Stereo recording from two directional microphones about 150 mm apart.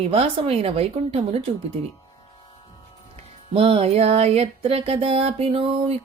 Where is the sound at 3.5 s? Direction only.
40° right (ahead or behind).